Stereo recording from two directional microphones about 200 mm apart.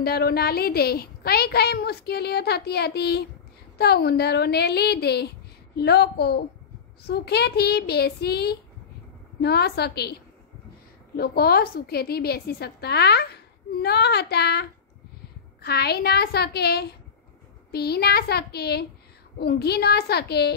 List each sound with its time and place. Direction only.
0.0 s a woman's voice: 50° left (ahead or behind)